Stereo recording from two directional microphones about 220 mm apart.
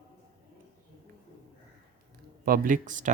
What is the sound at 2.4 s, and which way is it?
Speech, 40° right (ahead or behind).